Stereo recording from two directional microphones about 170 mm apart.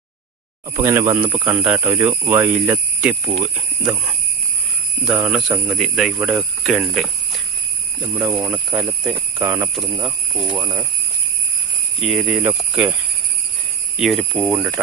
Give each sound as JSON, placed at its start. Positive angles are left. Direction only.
{"t": 0.8, "sound": "speech", "side_deg": -15}
{"t": 5.0, "sound": "speech", "side_deg": -5}
{"t": 8.0, "sound": "speech", "side_deg": -10}
{"t": 10.0, "sound": "speech", "side_deg": -30}
{"t": 10.6, "sound": "speech", "side_deg": -20}
{"t": 11.9, "sound": "speech", "side_deg": 0}
{"t": 14.4, "sound": "speech", "side_deg": -10}